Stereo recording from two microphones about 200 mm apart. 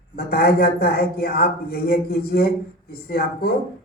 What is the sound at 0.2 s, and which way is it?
Speech, 50° left (ahead or behind).